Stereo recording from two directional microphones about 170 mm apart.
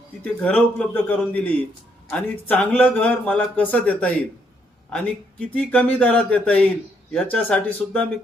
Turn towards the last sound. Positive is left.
turn(degrees=5)  # may be behind; listen again after turning